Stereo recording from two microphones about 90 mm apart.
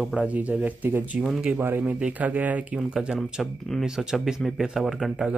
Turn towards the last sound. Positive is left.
turn(degrees=0)  # may be behind; listen again after turning